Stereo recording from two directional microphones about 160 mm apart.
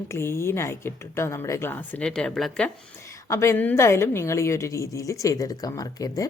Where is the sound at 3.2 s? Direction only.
15° left (ahead or behind).